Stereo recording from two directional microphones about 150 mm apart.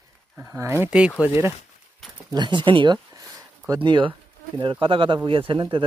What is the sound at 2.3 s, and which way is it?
Speech, 30° right (ahead or behind).